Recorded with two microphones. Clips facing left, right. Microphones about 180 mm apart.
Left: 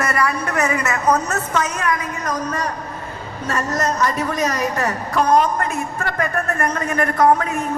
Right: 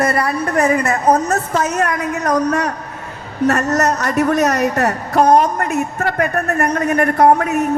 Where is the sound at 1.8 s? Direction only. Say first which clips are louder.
Right 4 dB; 60° right (ahead or behind).